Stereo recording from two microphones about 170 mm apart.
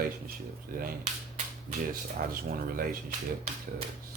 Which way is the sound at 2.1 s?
55° right (ahead or behind).